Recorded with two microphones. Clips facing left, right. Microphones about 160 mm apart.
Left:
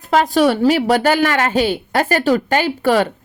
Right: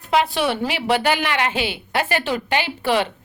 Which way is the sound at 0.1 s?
40° left (ahead or behind).